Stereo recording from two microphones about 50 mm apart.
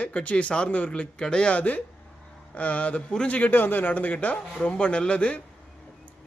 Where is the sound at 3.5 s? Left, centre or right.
Left.